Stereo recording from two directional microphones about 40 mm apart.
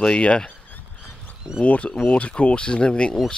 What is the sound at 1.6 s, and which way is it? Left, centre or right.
Speech, left.